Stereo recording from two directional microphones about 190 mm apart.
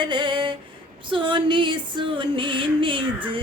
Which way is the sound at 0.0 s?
25° right (ahead or behind).